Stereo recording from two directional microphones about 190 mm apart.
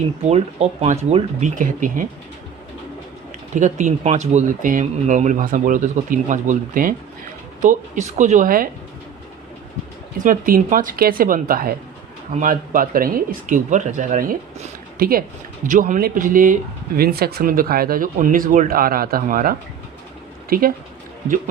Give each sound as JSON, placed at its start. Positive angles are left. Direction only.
{"t": 0.3, "sound": "speech", "side_deg": -35}
{"t": 3.5, "sound": "speech", "side_deg": -40}
{"t": 10.2, "sound": "speech", "side_deg": -45}